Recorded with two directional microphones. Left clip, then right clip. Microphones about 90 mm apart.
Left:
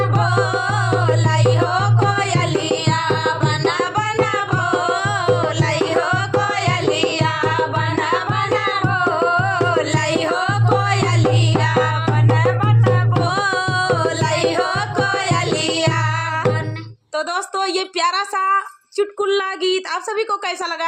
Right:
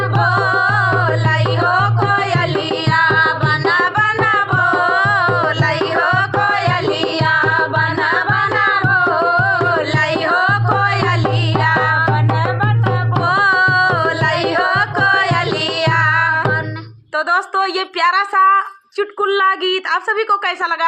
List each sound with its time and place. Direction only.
0.3 s music: 40° left (ahead or behind)
2.9 s music: 40° left (ahead or behind)
5.6 s music: 40° right (ahead or behind)
8.6 s music: 45° right (ahead or behind)
10.0 s music: 45° left (ahead or behind)
13.2 s music: 50° left (ahead or behind)
17.2 s a sound: 50° left (ahead or behind)